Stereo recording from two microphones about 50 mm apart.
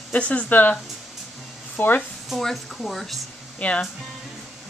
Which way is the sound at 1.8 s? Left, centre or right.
Left.